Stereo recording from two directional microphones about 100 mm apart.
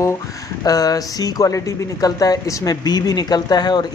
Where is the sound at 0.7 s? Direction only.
40° left (ahead or behind).